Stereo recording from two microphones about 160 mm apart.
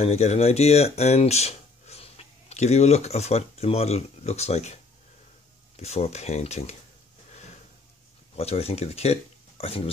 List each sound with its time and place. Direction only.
0.0 s speech: 40° left (ahead or behind)
5.8 s speech: 40° left (ahead or behind)
8.4 s speech: 40° left (ahead or behind)